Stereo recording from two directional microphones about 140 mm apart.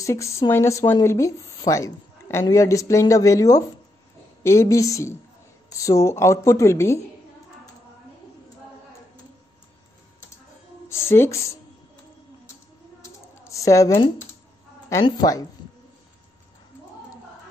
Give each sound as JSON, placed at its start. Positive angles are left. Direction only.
{"t": 0.0, "sound": "a woman's voice", "side_deg": 20}
{"t": 10.9, "sound": "speech", "side_deg": 20}
{"t": 13.0, "sound": "a sound", "side_deg": 20}
{"t": 15.0, "sound": "speech", "side_deg": 30}